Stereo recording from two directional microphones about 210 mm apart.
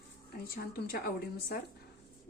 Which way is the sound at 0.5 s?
45° left (ahead or behind).